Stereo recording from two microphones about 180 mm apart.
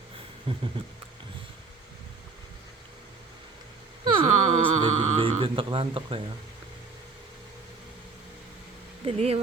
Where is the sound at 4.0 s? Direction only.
30° right (ahead or behind).